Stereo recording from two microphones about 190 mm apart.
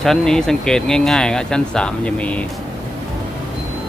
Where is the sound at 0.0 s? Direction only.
Centre (ahead or behind).